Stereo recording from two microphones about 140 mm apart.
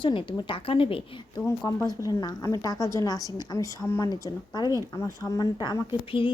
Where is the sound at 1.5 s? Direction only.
30° left (ahead or behind).